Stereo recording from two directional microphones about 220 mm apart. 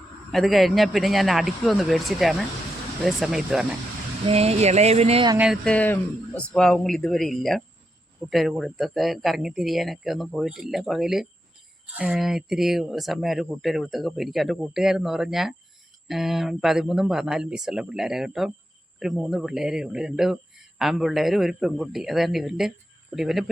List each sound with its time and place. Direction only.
0.3 s speech: centre (ahead or behind)
4.3 s speech: 30° right (ahead or behind)
5.4 s speech: centre (ahead or behind)